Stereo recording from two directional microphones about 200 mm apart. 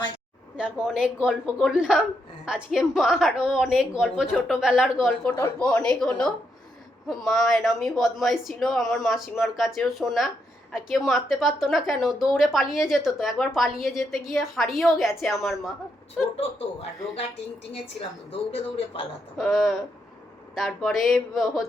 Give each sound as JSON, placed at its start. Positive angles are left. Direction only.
{"t": 0.5, "sound": "a woman's voice", "side_deg": -5}
{"t": 18.3, "sound": "speech", "side_deg": 30}
{"t": 19.4, "sound": "a woman's voice", "side_deg": 0}